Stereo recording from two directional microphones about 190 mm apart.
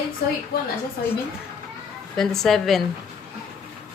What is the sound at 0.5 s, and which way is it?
Speech, 55° left (ahead or behind).